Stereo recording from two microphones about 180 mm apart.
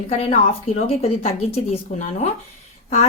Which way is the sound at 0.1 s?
35° left (ahead or behind).